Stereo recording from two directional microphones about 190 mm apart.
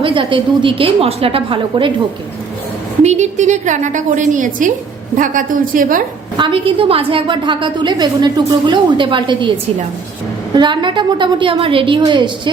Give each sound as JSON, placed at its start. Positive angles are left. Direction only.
{"t": 0.0, "sound": "a woman's voice", "side_deg": -25}
{"t": 3.0, "sound": "a woman's voice", "side_deg": -35}
{"t": 6.3, "sound": "a woman's voice", "side_deg": -25}
{"t": 10.5, "sound": "a woman's voice", "side_deg": -25}